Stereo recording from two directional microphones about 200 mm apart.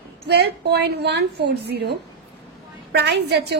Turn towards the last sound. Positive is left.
turn(degrees=-55)  # may be behind; listen again after turning